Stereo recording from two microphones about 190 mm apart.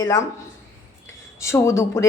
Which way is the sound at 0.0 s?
20° left (ahead or behind).